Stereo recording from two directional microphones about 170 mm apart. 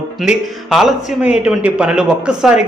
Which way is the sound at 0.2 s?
Centre (ahead or behind).